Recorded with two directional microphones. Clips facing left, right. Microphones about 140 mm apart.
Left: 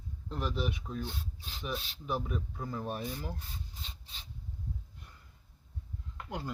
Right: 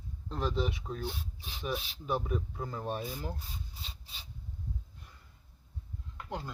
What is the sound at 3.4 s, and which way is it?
Rub, 10° right (ahead or behind).